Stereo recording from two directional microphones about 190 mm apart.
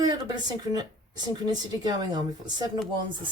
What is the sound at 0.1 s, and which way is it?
A woman's voice, 25° right (ahead or behind).